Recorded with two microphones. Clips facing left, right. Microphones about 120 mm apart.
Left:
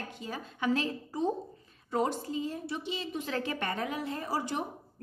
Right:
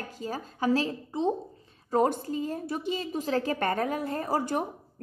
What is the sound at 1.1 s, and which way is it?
Speech, 20° right (ahead or behind).